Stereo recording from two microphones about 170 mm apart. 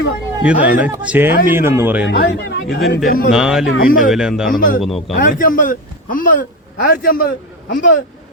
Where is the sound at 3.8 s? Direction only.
55° left (ahead or behind).